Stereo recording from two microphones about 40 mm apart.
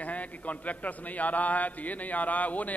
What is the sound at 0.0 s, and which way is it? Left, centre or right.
A man's voice, left.